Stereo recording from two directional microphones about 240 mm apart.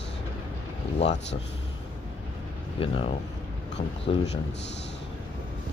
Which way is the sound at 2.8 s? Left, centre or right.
Left.